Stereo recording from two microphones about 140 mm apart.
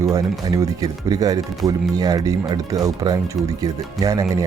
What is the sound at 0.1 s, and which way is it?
Speech, 25° right (ahead or behind).